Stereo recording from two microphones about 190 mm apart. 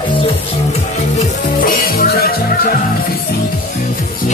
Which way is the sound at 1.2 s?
45° left (ahead or behind).